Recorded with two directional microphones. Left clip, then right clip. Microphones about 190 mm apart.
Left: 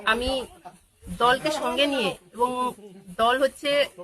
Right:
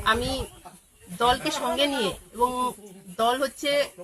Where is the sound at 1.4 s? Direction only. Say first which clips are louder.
Left 1 dB; 20° left (ahead or behind).